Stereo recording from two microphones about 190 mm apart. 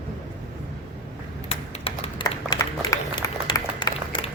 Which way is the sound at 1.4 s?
25° left (ahead or behind).